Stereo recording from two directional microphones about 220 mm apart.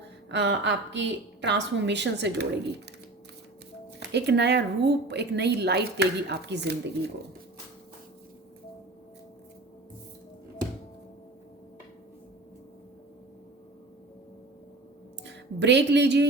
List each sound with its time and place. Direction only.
0.3 s a woman's voice: 55° right (ahead or behind)
4.1 s a woman's voice: 50° right (ahead or behind)
15.2 s a sound: 55° right (ahead or behind)